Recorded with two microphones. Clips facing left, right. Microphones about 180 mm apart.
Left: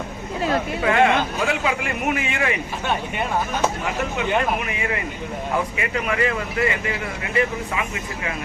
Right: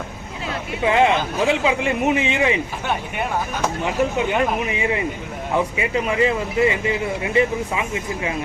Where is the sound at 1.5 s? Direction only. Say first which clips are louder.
Right 4 dB; 25° right (ahead or behind).